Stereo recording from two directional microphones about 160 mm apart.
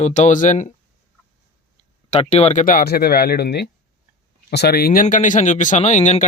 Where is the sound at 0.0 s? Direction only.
45° left (ahead or behind).